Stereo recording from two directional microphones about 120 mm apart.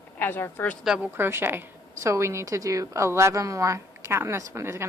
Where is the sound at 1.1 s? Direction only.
20° right (ahead or behind).